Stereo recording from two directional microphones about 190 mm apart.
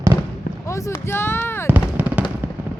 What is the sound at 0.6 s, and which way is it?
Speech, 15° left (ahead or behind).